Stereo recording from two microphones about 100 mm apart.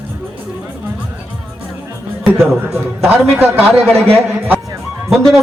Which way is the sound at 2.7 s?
20° right (ahead or behind).